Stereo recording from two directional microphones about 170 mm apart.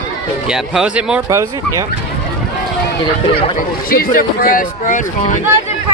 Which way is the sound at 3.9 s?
60° left (ahead or behind).